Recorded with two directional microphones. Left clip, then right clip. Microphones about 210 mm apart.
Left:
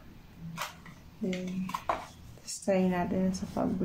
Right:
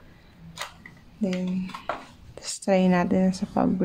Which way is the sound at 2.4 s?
45° right (ahead or behind).